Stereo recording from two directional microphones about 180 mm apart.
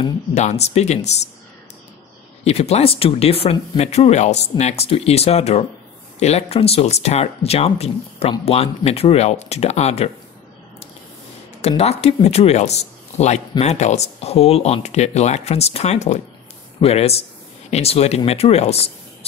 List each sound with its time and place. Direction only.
0.3 s speech: 40° left (ahead or behind)
2.4 s speech: 35° left (ahead or behind)
11.6 s speech: 35° left (ahead or behind)